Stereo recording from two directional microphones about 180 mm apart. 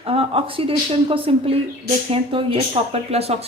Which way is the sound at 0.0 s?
30° right (ahead or behind).